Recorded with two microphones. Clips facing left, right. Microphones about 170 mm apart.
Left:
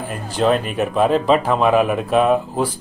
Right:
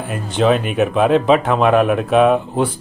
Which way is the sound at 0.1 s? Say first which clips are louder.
Right 2 dB; centre (ahead or behind).